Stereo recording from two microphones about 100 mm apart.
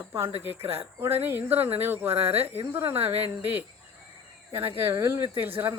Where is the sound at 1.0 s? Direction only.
20° right (ahead or behind).